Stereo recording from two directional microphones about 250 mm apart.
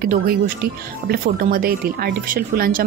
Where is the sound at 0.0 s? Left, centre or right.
Right.